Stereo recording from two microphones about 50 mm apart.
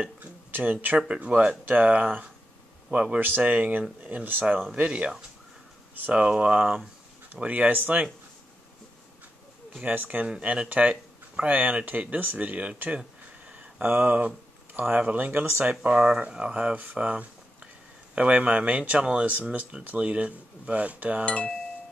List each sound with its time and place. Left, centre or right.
0.2 s a sound: right
0.9 s a man's voice: right
3.2 s speech: right
4.7 s speech: right
6.1 s speech: right
9.8 s speech: right
10.2 s speech: right
13.5 s a sound: right
13.8 s speech: right
14.7 s a sound: right
15.0 s speech: right
17.1 s a sound: right
18.1 s speech: right
21.3 s speech: left